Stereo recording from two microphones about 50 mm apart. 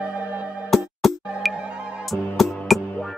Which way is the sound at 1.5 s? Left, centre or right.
Centre.